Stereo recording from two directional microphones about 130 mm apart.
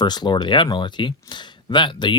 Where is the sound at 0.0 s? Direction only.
35° left (ahead or behind).